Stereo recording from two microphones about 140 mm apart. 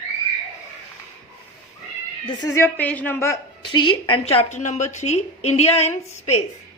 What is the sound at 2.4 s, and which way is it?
A woman's voice, 20° left (ahead or behind).